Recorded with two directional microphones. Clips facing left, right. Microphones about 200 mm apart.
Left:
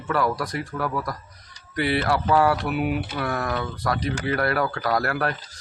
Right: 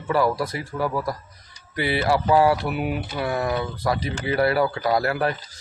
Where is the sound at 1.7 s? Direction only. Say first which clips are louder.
Right 1 dB; 25° right (ahead or behind).